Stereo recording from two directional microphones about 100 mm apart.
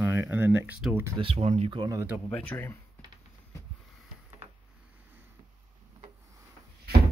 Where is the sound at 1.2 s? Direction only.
80° right.